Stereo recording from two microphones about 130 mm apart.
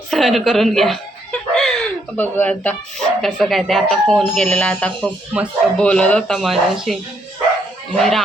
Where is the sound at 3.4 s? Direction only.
Centre (ahead or behind).